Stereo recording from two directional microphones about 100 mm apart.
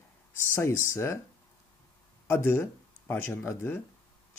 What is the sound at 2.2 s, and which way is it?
Speech, 20° left (ahead or behind).